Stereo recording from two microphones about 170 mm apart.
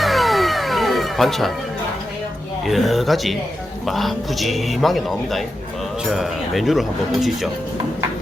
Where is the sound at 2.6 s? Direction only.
Centre (ahead or behind).